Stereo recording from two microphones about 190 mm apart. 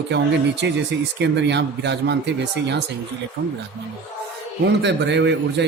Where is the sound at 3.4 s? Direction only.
70° right (ahead or behind).